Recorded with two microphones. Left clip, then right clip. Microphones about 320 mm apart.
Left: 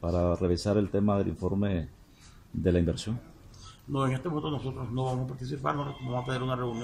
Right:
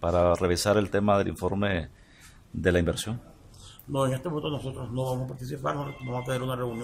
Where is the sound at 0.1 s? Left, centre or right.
Right.